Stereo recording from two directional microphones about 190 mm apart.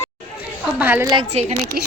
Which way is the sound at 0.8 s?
10° right (ahead or behind).